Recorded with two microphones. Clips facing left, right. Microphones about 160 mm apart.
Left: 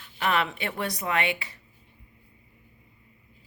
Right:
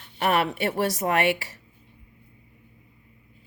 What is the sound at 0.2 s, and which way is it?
Speech, 45° right (ahead or behind).